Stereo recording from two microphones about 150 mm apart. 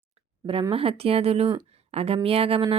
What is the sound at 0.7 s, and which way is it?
Speech, 40° right (ahead or behind).